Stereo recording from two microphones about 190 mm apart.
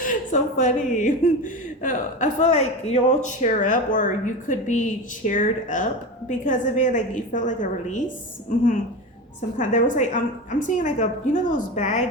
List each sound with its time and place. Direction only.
0.0 s speech: 45° left (ahead or behind)
9.6 s speech: 40° left (ahead or behind)